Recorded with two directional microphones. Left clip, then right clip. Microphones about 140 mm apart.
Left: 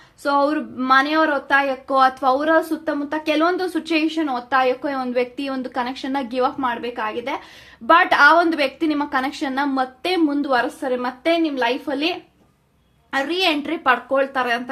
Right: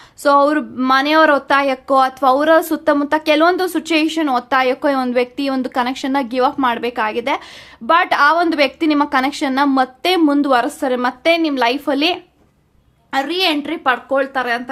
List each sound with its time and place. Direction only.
0.2 s speech: 40° right (ahead or behind)
13.1 s speech: 20° right (ahead or behind)